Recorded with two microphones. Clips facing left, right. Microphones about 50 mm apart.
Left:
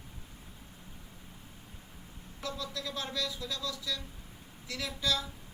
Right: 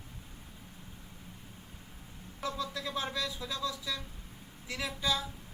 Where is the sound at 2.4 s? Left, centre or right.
Right.